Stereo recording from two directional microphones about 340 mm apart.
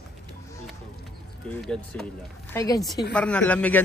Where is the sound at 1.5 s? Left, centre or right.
Centre.